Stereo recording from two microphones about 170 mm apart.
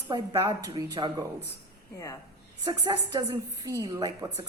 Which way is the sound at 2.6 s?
25° right (ahead or behind).